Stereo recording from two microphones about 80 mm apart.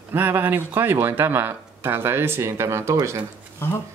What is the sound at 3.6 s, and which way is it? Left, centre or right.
Speech, left.